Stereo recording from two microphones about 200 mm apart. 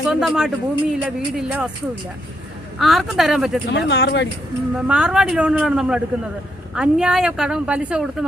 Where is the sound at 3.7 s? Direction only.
60° left (ahead or behind).